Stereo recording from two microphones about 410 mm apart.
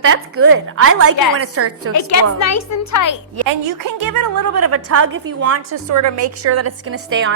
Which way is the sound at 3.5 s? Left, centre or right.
Right.